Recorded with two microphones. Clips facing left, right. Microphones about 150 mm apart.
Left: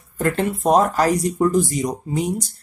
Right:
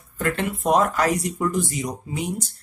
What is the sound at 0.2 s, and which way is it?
Speech, 35° left (ahead or behind).